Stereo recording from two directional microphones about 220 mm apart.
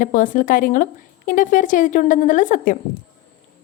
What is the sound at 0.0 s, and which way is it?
A woman's voice, 35° left (ahead or behind).